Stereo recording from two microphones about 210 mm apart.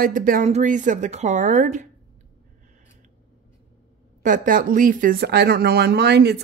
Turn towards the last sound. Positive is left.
turn(degrees=-50)  # may be behind; listen again after turning